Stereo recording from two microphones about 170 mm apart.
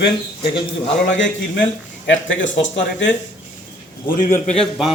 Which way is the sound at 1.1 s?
90° left.